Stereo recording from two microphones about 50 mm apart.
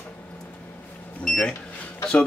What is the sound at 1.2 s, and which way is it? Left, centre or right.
Speech, centre.